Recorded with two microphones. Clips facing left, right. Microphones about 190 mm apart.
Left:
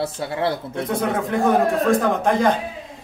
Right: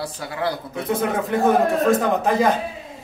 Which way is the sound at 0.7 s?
Centre (ahead or behind).